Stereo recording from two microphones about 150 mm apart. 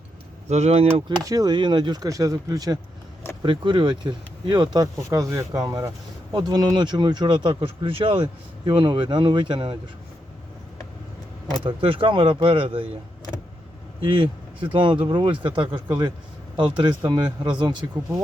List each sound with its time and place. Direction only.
0.4 s speech: 50° right (ahead or behind)
1.2 s speech: 25° right (ahead or behind)
11.6 s speech: 35° right (ahead or behind)
14.0 s speech: 35° right (ahead or behind)